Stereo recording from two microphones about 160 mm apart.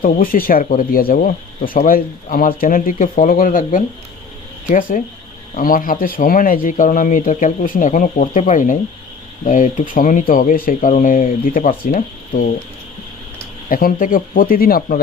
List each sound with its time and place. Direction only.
0.0 s speech: 60° left (ahead or behind)
13.7 s speech: 60° left (ahead or behind)